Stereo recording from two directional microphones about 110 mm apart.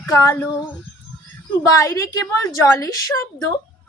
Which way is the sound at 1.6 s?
30° left (ahead or behind).